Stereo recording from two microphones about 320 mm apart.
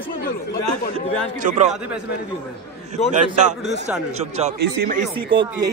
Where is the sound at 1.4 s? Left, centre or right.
Right.